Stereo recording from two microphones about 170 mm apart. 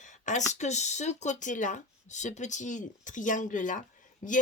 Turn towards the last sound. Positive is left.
turn(degrees=45)  # may be behind; listen again after turning